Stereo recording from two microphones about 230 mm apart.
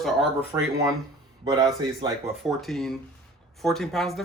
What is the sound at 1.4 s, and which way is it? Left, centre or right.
Speech, centre.